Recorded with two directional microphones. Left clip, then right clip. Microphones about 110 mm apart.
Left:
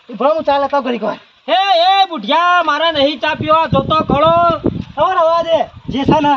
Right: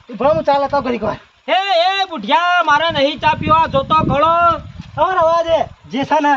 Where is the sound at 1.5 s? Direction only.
10° right (ahead or behind).